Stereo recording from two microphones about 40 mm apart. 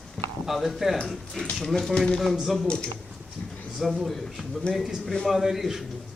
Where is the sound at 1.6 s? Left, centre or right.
Centre.